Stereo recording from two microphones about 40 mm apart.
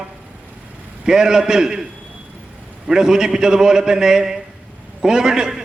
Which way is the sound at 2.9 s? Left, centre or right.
Centre.